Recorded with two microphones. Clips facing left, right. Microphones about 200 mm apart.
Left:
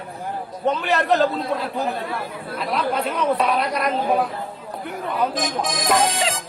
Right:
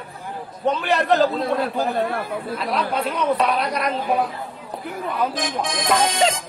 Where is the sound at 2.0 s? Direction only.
55° right (ahead or behind).